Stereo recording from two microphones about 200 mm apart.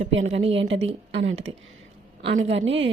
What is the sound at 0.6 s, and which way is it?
Speech, 70° right (ahead or behind).